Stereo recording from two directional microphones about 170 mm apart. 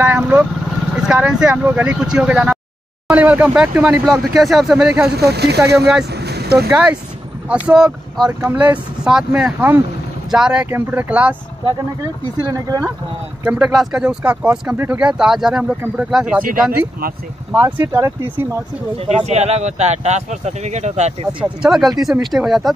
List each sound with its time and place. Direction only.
0.0 s speech: 10° right (ahead or behind)
5.1 s speech: 75° right (ahead or behind)
6.1 s vehicle: 75° right (ahead or behind)
6.7 s speech: 5° right (ahead or behind)
12.5 s speech: 20° right (ahead or behind)
13.4 s speech: 5° right (ahead or behind)
17.5 s speech: 10° right (ahead or behind)
18.9 s speech: 40° right (ahead or behind)
21.5 s speech: 5° right (ahead or behind)